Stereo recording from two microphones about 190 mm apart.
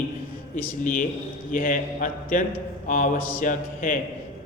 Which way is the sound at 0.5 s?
45° left (ahead or behind).